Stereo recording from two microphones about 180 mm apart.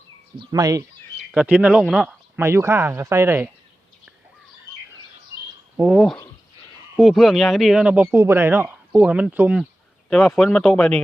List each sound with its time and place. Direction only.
0.3 s speech: 20° right (ahead or behind)
1.3 s speech: 5° right (ahead or behind)
5.7 s speech: 5° right (ahead or behind)